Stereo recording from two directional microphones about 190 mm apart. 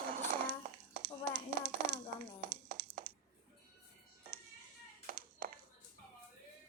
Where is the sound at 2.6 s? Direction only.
55° right (ahead or behind).